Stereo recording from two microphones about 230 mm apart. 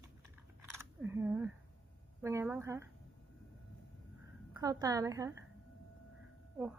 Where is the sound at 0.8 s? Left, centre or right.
Centre.